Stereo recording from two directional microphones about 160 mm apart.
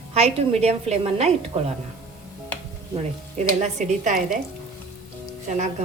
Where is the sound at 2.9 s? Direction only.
45° right (ahead or behind).